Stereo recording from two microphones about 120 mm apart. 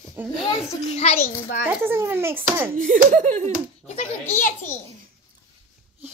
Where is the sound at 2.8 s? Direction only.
90° right.